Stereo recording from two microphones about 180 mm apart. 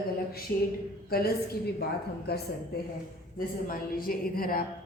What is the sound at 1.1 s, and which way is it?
Speech, 60° left (ahead or behind).